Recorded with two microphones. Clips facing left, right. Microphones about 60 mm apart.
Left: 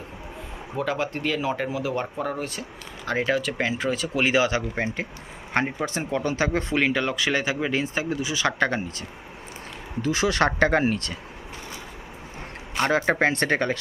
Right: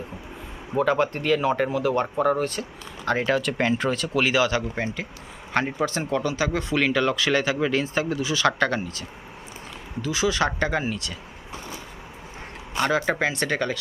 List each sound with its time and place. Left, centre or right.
0.8 s speech: centre
4.2 s speech: left
6.2 s speech: left; by 8.8 s centre
10.0 s speech: left
12.8 s speech: left